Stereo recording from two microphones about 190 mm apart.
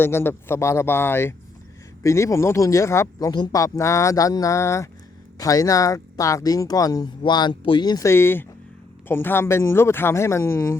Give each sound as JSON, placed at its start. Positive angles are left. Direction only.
{"t": 0.0, "sound": "speech", "side_deg": 10}